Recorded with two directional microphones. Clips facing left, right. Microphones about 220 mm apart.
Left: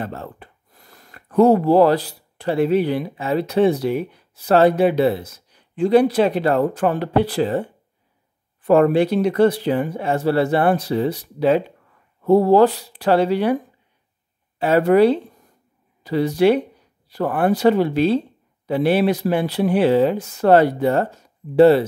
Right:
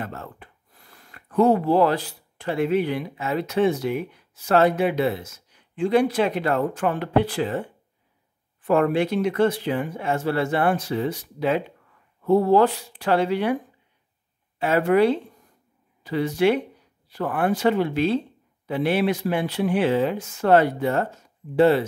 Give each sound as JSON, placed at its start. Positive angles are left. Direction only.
{"t": 0.0, "sound": "speech", "side_deg": 30}
{"t": 8.6, "sound": "speech", "side_deg": 35}
{"t": 14.6, "sound": "speech", "side_deg": 35}